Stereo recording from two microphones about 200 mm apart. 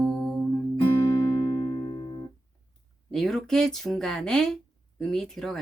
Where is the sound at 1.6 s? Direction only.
20° left (ahead or behind).